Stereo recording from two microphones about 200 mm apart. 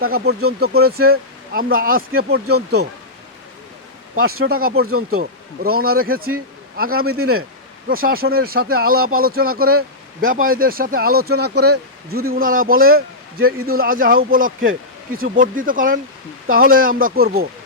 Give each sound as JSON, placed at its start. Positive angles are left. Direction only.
{"t": 0.0, "sound": "speech", "side_deg": -50}
{"t": 4.1, "sound": "speech", "side_deg": -50}